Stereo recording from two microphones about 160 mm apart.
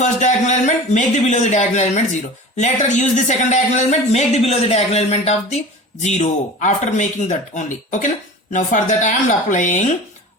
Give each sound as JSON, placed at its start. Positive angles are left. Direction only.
{"t": 0.0, "sound": "a man's voice", "side_deg": 50}